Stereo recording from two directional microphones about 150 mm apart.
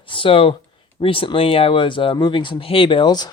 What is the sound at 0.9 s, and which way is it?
Speech, 35° left (ahead or behind).